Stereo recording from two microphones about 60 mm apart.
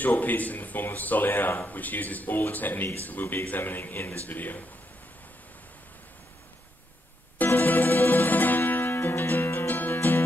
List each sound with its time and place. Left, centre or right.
0.0 s speech: left
7.4 s music: left